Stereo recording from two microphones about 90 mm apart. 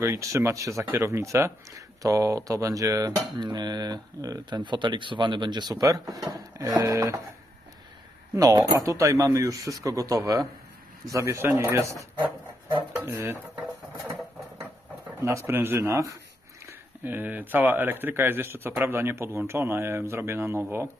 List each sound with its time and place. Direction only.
0.0 s speech: 35° right (ahead or behind)
3.4 s speech: 50° right (ahead or behind)
6.8 s speech: 35° right (ahead or behind)
8.4 s speech: 40° right (ahead or behind)
12.7 s speech: 20° right (ahead or behind)
15.2 s speech: 30° right (ahead or behind)
16.6 s speech: 20° right (ahead or behind)